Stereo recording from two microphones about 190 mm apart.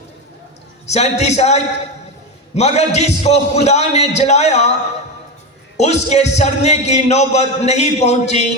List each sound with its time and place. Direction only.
0.9 s a man's voice: 35° left (ahead or behind)
5.7 s a man's voice: 35° left (ahead or behind)